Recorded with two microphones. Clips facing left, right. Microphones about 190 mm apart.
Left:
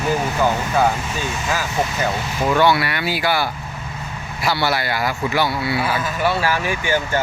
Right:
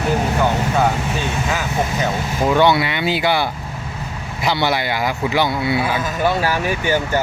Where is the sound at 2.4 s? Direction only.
20° right (ahead or behind).